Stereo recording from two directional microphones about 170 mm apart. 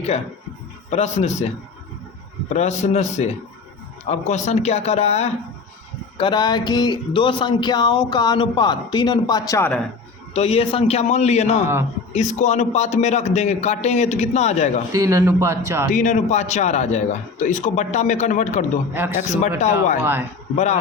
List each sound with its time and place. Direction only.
0.9 s a man's voice: 40° left (ahead or behind)
2.5 s a man's voice: 40° left (ahead or behind)
6.1 s speech: 30° left (ahead or behind)
10.3 s a man's voice: 35° left (ahead or behind)
14.9 s a man's voice: 20° right (ahead or behind)
15.9 s a man's voice: 45° left (ahead or behind)